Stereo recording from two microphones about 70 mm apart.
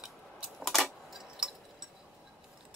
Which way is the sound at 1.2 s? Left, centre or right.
Centre.